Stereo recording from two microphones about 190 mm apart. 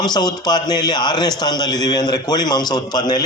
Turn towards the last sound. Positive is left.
turn(degrees=20)  # may be behind; listen again after turning